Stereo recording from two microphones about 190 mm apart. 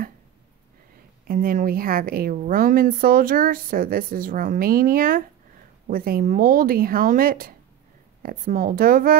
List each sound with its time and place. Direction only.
1.2 s a woman's voice: 50° right (ahead or behind)